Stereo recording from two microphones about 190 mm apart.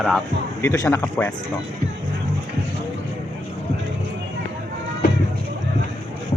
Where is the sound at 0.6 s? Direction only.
15° left (ahead or behind).